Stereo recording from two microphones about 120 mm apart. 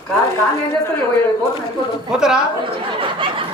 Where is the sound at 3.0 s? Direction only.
45° right (ahead or behind).